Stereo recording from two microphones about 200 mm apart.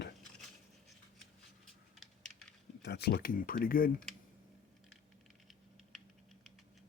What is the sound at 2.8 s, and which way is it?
Speech, 55° left (ahead or behind).